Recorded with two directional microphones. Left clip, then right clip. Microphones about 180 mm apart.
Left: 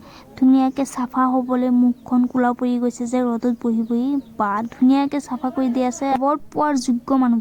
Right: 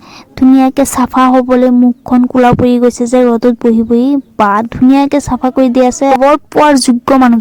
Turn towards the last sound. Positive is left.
turn(degrees=-45)  # may be behind; listen again after turning